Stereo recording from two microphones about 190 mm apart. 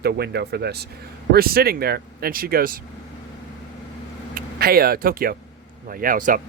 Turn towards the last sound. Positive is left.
turn(degrees=-45)  # may be behind; listen again after turning